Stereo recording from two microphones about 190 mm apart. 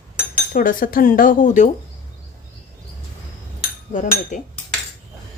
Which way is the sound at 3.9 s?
45° left (ahead or behind).